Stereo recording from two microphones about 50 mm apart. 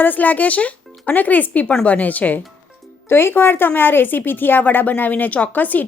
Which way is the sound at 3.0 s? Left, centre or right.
Left.